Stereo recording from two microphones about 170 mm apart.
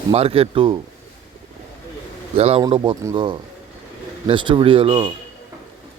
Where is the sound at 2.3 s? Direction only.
35° right (ahead or behind).